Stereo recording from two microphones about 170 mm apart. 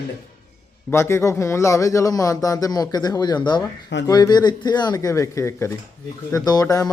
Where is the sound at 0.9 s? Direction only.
15° left (ahead or behind).